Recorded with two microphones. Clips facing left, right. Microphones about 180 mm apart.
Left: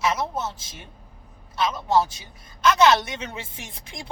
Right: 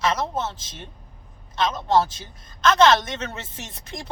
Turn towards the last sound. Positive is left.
turn(degrees=10)  # may be behind; listen again after turning